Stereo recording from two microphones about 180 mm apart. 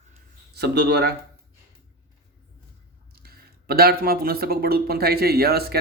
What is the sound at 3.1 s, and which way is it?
Speech, 60° right (ahead or behind).